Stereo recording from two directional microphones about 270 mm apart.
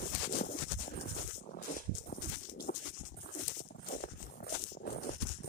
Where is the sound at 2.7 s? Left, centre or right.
Left.